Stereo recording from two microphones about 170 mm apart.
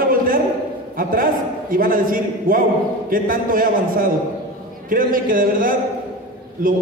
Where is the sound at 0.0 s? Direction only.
55° right (ahead or behind).